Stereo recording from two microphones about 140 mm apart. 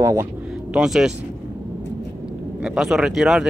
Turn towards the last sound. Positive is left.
turn(degrees=-5)  # may be behind; listen again after turning